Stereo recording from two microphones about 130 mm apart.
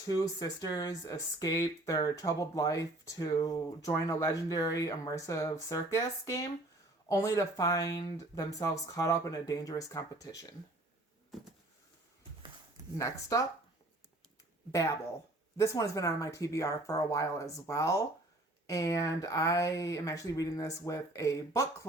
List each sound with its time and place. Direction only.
0.0 s speech: 30° left (ahead or behind)
13.0 s speech: 25° left (ahead or behind)
14.7 s speech: 25° left (ahead or behind)